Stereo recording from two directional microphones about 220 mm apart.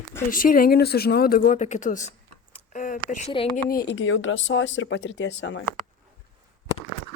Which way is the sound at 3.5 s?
45° left (ahead or behind).